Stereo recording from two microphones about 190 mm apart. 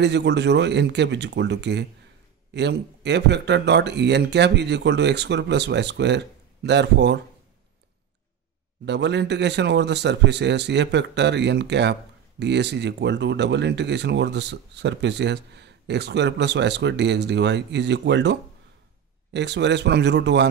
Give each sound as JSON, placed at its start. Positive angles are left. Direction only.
{"t": 0.0, "sound": "a man's voice", "side_deg": -65}
{"t": 8.8, "sound": "a man's voice", "side_deg": -65}